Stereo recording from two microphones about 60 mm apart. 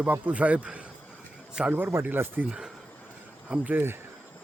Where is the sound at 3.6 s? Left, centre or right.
Right.